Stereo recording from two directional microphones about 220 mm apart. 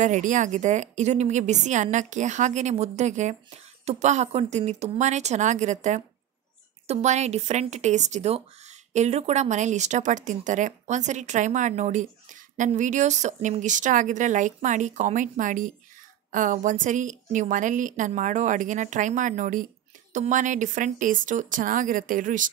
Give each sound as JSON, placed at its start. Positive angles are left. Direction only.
{"t": 0.0, "sound": "speech", "side_deg": -35}